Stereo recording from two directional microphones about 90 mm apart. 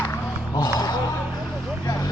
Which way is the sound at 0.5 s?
45° left (ahead or behind).